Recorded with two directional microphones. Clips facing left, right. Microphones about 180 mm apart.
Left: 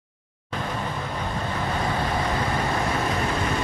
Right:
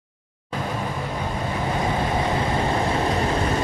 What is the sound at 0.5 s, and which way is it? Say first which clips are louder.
Vehicle: right 2 dB; 10° right (ahead or behind).